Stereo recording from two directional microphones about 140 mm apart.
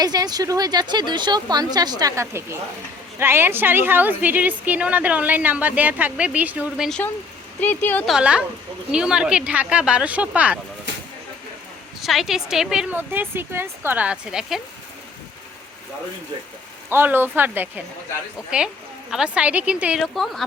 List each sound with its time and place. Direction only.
0.0 s a woman's voice: 30° right (ahead or behind); by 6.8 s 10° right (ahead or behind)
7.6 s speech: 15° left (ahead or behind)
8.0 s a woman's voice: 5° right (ahead or behind)
11.9 s speech: centre (ahead or behind)
16.9 s a woman's voice: 15° right (ahead or behind); by 20.4 s centre (ahead or behind)